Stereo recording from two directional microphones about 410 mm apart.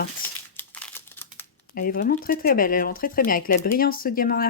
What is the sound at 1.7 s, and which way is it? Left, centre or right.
Speech, left.